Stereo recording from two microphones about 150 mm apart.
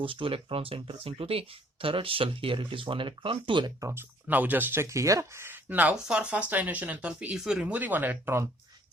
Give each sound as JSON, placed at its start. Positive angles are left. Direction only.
{"t": 0.0, "sound": "speech", "side_deg": -35}
{"t": 3.8, "sound": "speech", "side_deg": -15}